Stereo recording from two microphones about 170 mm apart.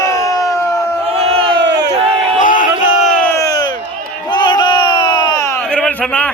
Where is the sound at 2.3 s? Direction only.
50° left (ahead or behind).